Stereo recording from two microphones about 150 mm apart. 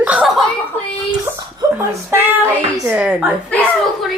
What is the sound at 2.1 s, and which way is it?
A woman's voice, 15° right (ahead or behind).